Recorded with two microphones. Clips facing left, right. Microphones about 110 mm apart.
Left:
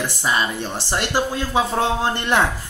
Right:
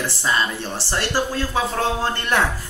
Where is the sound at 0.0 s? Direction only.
15° left (ahead or behind).